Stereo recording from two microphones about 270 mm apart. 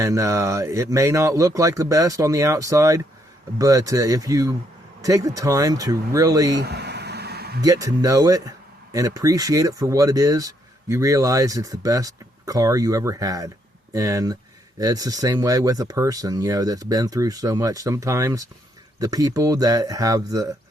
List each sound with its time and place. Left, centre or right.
0.0 s speech: centre
6.6 s a sound: right
7.6 s speech: centre